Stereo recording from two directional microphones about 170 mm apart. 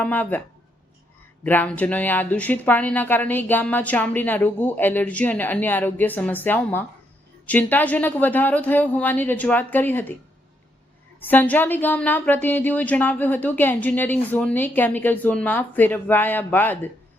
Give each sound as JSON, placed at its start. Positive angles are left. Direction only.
{"t": 0.0, "sound": "a woman's voice", "side_deg": 10}
{"t": 1.5, "sound": "a woman's voice", "side_deg": 10}
{"t": 11.2, "sound": "a woman's voice", "side_deg": 10}